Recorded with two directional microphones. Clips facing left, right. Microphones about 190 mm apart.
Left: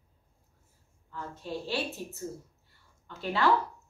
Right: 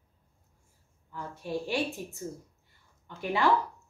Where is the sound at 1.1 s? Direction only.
15° right (ahead or behind).